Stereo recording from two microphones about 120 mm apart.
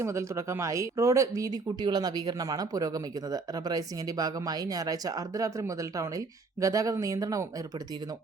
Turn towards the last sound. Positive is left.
turn(degrees=-30)  # may be behind; listen again after turning